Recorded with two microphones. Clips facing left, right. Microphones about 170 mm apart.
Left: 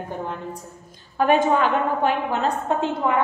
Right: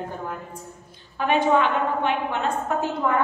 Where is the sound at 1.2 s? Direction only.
45° left (ahead or behind).